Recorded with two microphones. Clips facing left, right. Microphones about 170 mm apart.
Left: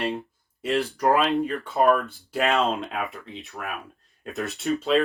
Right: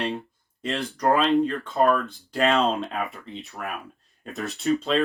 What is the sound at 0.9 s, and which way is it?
Speech, 5° left (ahead or behind).